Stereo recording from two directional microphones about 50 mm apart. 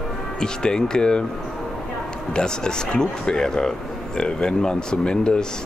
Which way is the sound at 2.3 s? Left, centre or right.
Centre.